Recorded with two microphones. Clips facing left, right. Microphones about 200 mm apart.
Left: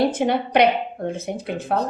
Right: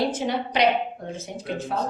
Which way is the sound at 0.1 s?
55° left (ahead or behind).